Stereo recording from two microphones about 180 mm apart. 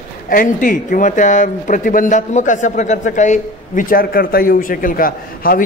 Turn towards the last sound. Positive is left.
turn(degrees=50)  # may be behind; listen again after turning